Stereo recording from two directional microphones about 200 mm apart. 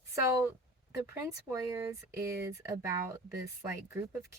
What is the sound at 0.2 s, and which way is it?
Speech, 15° right (ahead or behind).